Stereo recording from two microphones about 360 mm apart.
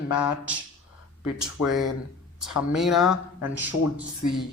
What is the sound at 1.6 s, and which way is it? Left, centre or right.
A man's voice, centre.